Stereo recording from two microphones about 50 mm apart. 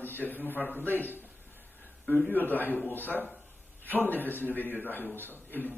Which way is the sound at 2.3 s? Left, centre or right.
Left.